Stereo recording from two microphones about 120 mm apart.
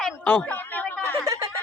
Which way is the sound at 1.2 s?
25° right (ahead or behind).